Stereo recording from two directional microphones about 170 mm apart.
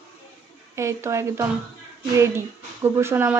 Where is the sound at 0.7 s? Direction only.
15° right (ahead or behind).